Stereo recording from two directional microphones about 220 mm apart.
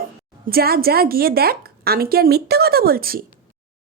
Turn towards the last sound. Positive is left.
turn(degrees=-40)  # may be behind; listen again after turning